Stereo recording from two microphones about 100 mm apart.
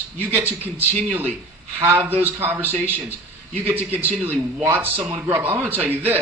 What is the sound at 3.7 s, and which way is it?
A man's voice, 20° right (ahead or behind).